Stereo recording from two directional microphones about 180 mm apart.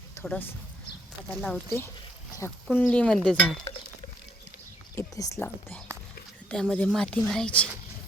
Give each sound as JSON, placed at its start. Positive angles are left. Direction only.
{"t": 0.2, "sound": "speech", "side_deg": 10}
{"t": 1.3, "sound": "speech", "side_deg": 0}
{"t": 2.6, "sound": "speech", "side_deg": 10}
{"t": 4.9, "sound": "speech", "side_deg": 20}